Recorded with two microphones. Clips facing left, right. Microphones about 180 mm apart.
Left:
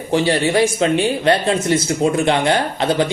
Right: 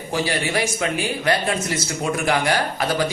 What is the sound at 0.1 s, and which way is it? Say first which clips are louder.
Speech: left 7 dB; 25° left (ahead or behind).